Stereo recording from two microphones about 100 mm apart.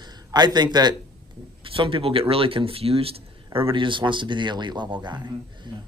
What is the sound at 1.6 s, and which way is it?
A man's voice, 60° right (ahead or behind).